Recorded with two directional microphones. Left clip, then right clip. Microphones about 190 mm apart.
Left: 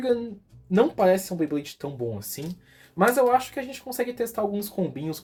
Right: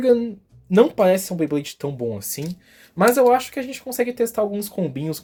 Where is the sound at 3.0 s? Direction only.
50° right (ahead or behind).